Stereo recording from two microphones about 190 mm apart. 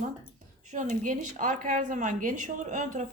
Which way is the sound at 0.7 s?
40° right (ahead or behind).